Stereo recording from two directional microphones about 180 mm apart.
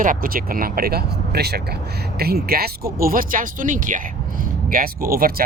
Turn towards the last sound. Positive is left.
turn(degrees=-55)  # may be behind; listen again after turning